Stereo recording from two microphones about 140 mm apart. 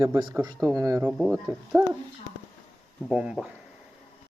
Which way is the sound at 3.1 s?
5° right (ahead or behind).